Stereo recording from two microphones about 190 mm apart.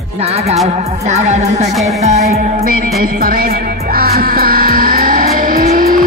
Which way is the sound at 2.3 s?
50° right (ahead or behind).